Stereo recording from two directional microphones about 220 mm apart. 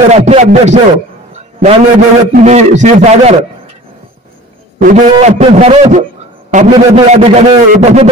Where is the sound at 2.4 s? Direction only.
30° right (ahead or behind).